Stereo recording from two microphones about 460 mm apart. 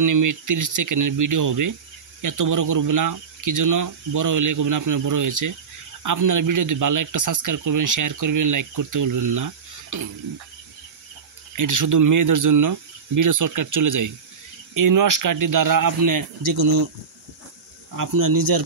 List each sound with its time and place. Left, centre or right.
0.0 s speech: right
11.5 s speech: right
17.9 s speech: right